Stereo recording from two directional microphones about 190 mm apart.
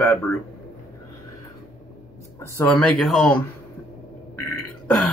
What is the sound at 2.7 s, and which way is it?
Speech, centre (ahead or behind).